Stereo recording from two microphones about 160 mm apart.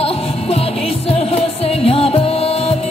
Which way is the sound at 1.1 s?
40° left (ahead or behind).